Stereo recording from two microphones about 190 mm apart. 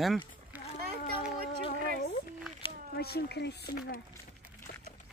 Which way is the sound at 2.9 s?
55° left (ahead or behind).